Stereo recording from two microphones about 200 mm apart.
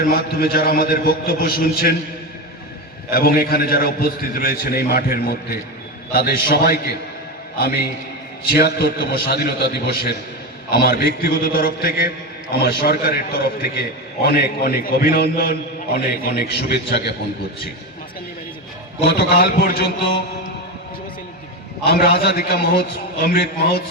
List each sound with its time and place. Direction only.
0.0 s a man's voice: 50° left (ahead or behind)
3.1 s a man's voice: 50° left (ahead or behind)
19.0 s a man's voice: 55° left (ahead or behind)
21.8 s a man's voice: 55° left (ahead or behind)